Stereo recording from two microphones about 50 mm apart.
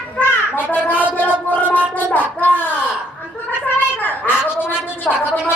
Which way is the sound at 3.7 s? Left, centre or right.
Left.